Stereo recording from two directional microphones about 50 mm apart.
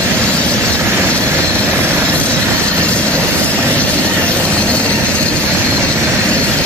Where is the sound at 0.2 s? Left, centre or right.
Left.